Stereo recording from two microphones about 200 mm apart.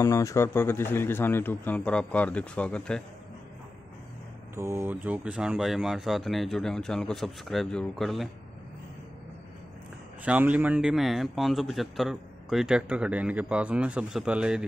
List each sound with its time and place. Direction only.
0.0 s a man's voice: 15° left (ahead or behind)
4.6 s a man's voice: 15° right (ahead or behind)
10.2 s a man's voice: 5° right (ahead or behind)